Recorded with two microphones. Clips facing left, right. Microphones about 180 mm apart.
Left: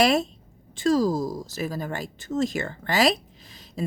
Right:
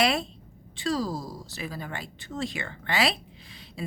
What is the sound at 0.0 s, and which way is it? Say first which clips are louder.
Speech: left 5 dB; 45° left (ahead or behind).